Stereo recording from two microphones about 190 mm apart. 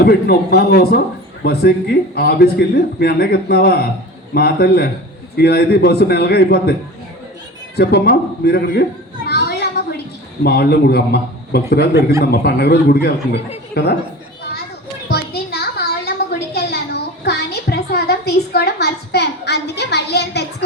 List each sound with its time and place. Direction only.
0.0 s speech: 55° left (ahead or behind)
7.8 s speech: 60° left (ahead or behind)
15.1 s a sound: 55° left (ahead or behind)